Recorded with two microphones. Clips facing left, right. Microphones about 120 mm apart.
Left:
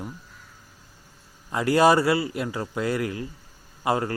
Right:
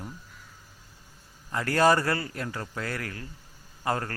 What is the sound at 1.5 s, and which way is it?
A man's voice, 15° left (ahead or behind).